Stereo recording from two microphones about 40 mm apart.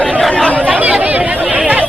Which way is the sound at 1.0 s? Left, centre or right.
Right.